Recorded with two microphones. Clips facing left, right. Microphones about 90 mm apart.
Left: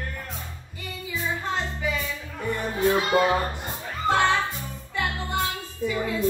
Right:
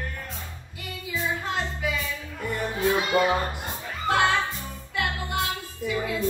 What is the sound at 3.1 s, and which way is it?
Music, 30° left (ahead or behind).